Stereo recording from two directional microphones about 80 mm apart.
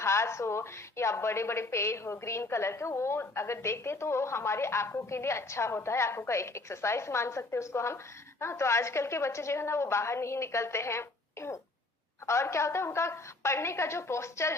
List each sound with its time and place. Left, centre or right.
0.0 s a woman's voice: left